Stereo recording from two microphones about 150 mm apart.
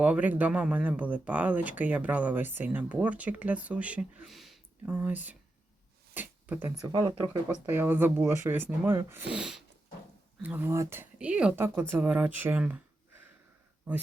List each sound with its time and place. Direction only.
0.0 s speech: 10° right (ahead or behind)
13.9 s speech: 10° right (ahead or behind)